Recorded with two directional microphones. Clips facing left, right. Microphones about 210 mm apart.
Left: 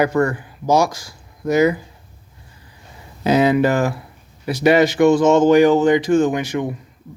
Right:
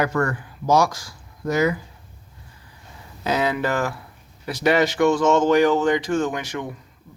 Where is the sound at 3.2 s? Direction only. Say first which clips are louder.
Left 8 dB; 20° left (ahead or behind).